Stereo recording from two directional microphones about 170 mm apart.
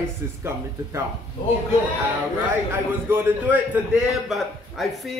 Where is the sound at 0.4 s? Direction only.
15° right (ahead or behind).